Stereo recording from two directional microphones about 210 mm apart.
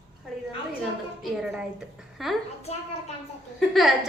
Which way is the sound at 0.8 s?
5° right (ahead or behind).